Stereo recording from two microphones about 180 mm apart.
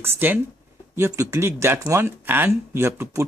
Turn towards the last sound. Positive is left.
turn(degrees=-15)  # may be behind; listen again after turning